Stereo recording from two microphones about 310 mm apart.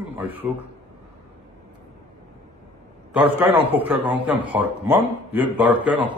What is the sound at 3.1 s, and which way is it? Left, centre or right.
A man's voice, centre.